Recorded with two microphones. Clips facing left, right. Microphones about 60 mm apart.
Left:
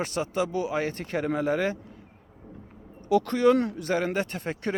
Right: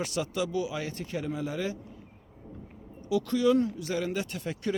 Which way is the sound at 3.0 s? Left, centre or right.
Left.